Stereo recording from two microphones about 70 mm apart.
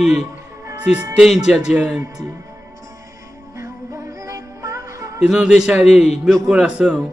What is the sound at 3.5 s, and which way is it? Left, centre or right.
Music, right.